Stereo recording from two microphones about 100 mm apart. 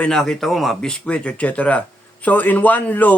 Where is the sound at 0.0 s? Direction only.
5° left (ahead or behind).